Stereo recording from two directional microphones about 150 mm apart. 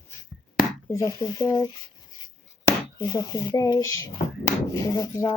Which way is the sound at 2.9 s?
30° left (ahead or behind).